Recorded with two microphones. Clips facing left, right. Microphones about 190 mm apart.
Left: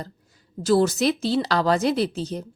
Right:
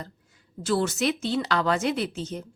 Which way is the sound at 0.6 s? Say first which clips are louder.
Left 5 dB; 40° left (ahead or behind).